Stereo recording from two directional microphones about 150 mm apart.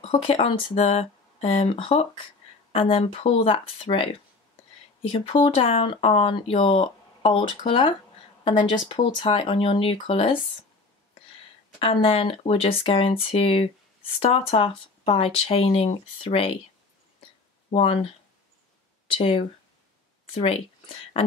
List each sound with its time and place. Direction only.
0.0 s speech: 40° left (ahead or behind)
5.1 s speech: 35° left (ahead or behind)
11.8 s speech: 35° left (ahead or behind)
19.1 s speech: 40° left (ahead or behind)